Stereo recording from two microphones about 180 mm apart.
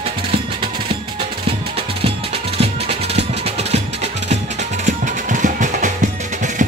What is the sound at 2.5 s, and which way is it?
Music, 35° right (ahead or behind).